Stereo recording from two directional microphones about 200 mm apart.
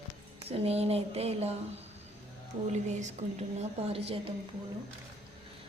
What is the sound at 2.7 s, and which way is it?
A woman's voice, 35° right (ahead or behind).